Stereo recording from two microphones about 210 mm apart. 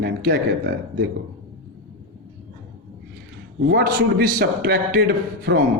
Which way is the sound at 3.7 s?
45° right (ahead or behind).